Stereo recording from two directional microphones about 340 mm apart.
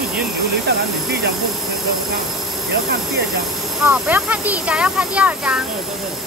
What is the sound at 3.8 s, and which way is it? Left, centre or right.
Speech, centre.